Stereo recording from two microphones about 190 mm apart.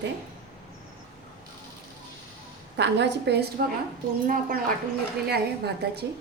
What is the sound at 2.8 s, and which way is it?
Speech, 65° right (ahead or behind).